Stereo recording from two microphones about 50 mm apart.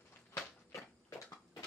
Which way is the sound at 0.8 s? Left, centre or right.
Left.